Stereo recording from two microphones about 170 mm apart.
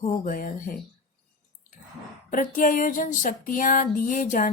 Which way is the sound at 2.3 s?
50° left (ahead or behind).